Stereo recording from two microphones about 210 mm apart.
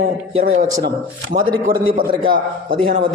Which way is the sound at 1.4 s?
45° right (ahead or behind).